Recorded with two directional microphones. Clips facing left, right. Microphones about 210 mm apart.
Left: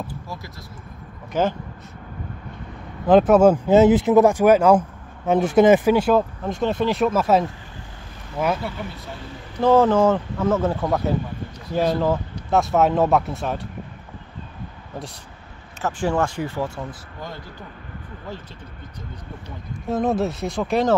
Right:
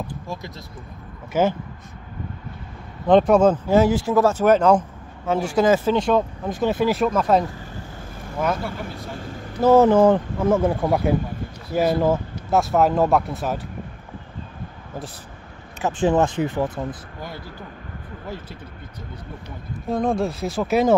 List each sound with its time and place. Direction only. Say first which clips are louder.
1.3 s speech: right 2 dB; 10° right (ahead or behind)
3.1 s speech: left 1 dB; 5° left (ahead or behind)
3.6 s speech: left 3 dB; 20° left (ahead or behind)
5.9 s speech: left 1 dB; 5° left (ahead or behind)
9.6 s speech: right 2 dB; 10° right (ahead or behind)
15.8 s speech: right 3 dB; 20° right (ahead or behind)
19.9 s speech: even; 5° left (ahead or behind)